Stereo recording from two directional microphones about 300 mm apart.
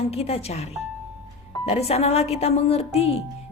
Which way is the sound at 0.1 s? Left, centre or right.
Centre.